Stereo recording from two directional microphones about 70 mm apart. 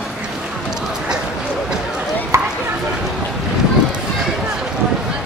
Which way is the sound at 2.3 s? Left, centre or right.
Right.